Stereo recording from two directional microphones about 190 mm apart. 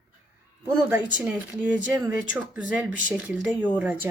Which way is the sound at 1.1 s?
5° right (ahead or behind).